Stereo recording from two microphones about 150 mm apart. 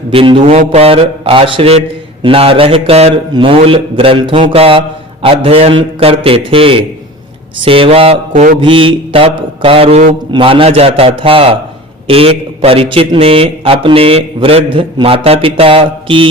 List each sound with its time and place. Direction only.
0.1 s a man's voice: 35° right (ahead or behind)
8.3 s mantra: 60° right (ahead or behind)
8.6 s a man's voice: 35° right (ahead or behind)
10.3 s a man's voice: 35° right (ahead or behind)